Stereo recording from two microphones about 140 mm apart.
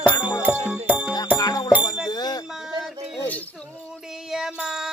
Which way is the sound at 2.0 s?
30° left (ahead or behind).